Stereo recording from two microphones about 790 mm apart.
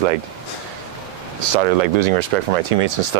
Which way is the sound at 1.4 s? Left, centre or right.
Right.